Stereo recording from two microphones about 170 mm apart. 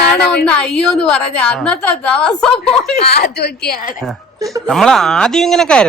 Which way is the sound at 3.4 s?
70° left (ahead or behind).